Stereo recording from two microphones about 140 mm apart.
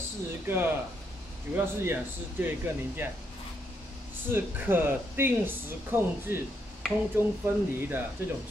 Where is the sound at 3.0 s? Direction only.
15° right (ahead or behind).